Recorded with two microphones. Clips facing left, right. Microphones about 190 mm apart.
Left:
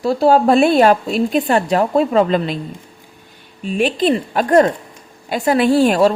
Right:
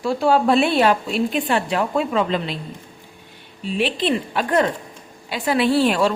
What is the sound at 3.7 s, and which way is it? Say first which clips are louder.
Speech: left 5 dB; 45° left (ahead or behind).